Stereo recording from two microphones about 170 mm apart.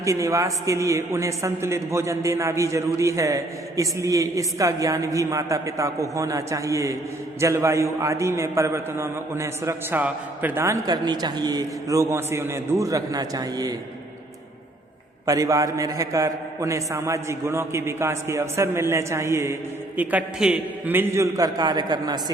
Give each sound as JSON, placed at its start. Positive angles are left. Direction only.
{"t": 0.0, "sound": "a man's voice", "side_deg": -20}
{"t": 15.3, "sound": "a man's voice", "side_deg": -20}